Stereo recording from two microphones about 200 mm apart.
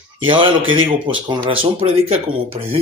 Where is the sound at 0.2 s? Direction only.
25° right (ahead or behind).